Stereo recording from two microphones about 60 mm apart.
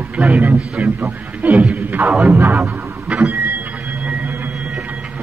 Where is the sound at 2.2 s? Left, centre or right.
Right.